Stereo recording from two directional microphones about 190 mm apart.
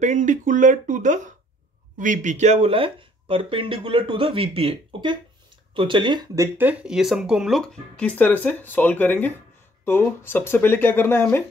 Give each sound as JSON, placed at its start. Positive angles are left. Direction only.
{"t": 0.0, "sound": "speech", "side_deg": -40}